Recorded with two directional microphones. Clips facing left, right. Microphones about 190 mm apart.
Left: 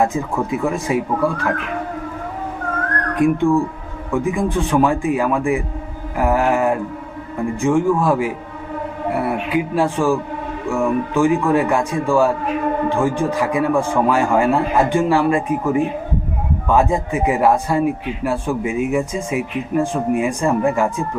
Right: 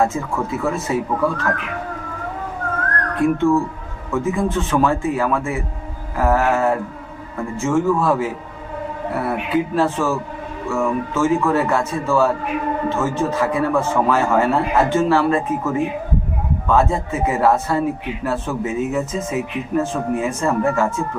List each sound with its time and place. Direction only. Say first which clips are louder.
0.0 s speech: left 1 dB; 15° left (ahead or behind)
3.2 s speech: left 1 dB; 15° left (ahead or behind)
6.1 s a sound: left 1 dB; 15° left (ahead or behind)
7.5 s speech: left 1 dB; 15° left (ahead or behind)